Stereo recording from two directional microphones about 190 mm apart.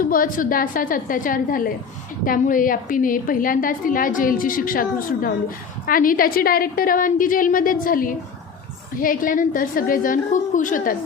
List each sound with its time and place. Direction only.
0.0 s a woman's voice: 45° left (ahead or behind)